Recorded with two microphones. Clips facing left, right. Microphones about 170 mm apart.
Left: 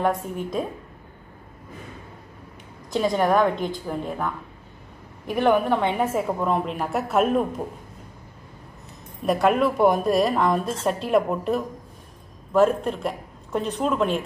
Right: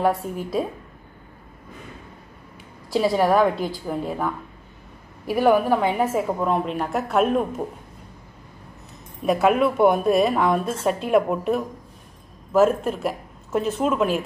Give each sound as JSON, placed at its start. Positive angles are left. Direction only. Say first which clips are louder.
{"t": 0.0, "sound": "a woman's voice", "louder": "right 2 dB", "side_deg": -5}
{"t": 2.9, "sound": "a woman's voice", "louder": "right 2 dB", "side_deg": -5}
{"t": 9.2, "sound": "a woman's voice", "louder": "right 1 dB", "side_deg": 0}